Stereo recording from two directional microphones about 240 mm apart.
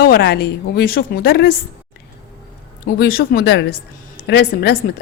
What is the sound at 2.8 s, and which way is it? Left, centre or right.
A woman's voice, left.